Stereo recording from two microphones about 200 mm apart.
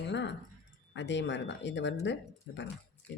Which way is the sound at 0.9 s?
60° left (ahead or behind).